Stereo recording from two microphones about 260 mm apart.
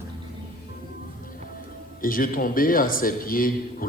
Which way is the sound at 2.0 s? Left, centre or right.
Left.